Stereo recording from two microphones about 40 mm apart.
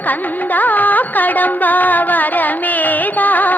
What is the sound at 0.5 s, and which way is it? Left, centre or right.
Music, left.